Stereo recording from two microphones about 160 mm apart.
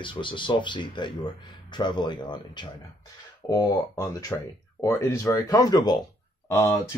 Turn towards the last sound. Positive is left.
turn(degrees=20)  # may be behind; listen again after turning